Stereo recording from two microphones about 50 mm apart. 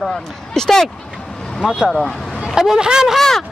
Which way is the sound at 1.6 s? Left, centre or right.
Centre.